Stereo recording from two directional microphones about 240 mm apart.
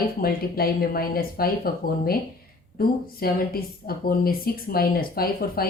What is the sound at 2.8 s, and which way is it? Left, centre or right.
A woman's voice, left.